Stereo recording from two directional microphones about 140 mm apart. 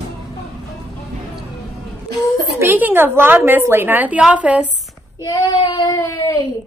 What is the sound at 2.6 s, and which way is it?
A woman's voice, 15° right (ahead or behind).